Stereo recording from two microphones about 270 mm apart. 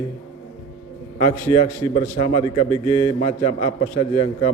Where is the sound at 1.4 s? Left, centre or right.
Centre.